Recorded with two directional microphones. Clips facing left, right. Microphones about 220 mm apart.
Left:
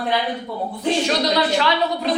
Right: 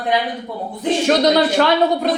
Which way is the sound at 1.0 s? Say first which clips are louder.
Right 9 dB; 50° right (ahead or behind).